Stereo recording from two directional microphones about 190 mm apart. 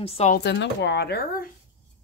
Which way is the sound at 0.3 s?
60° left (ahead or behind).